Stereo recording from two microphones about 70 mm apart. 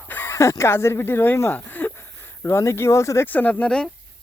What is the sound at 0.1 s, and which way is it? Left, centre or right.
Chicken, left.